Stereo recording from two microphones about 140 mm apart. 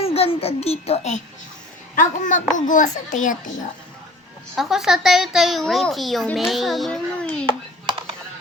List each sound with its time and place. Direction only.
0.0 s a child's voice: 45° left (ahead or behind)
2.0 s a child's voice: 65° left (ahead or behind)
4.5 s a woman's voice: 5° right (ahead or behind)